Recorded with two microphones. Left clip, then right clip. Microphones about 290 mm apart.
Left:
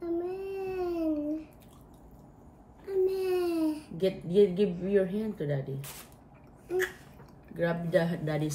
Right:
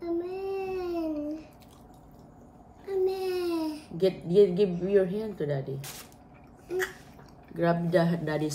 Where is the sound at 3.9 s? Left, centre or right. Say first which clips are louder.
Right 4 dB; centre.